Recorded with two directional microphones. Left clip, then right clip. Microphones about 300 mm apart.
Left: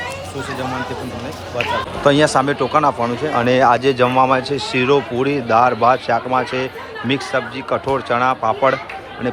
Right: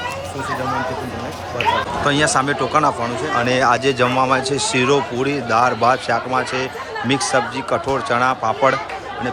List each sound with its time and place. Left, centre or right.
2.0 s speech: centre